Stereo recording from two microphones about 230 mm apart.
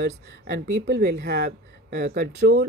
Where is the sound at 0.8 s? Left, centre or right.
Right.